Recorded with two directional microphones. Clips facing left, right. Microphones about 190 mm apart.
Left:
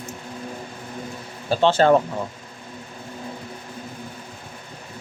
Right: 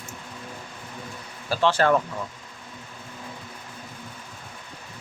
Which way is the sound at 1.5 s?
25° left (ahead or behind).